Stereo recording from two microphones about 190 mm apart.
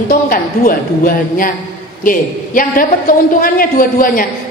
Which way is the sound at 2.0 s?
45° left (ahead or behind).